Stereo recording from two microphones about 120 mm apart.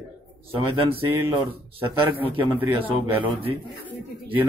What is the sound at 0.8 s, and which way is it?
Speech, 50° right (ahead or behind).